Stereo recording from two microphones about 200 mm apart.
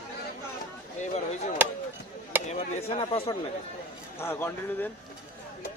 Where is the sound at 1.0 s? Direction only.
35° left (ahead or behind).